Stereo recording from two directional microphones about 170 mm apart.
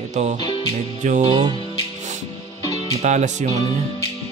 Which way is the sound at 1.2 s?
25° right (ahead or behind).